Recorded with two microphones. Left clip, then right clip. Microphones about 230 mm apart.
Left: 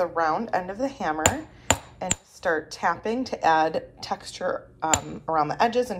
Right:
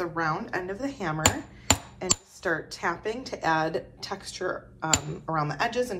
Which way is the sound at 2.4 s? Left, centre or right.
Left.